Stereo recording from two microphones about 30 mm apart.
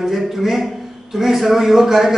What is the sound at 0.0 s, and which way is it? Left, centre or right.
Speech, centre.